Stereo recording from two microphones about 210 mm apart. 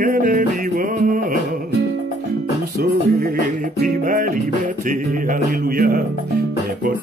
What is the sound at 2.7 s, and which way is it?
Music, 35° right (ahead or behind).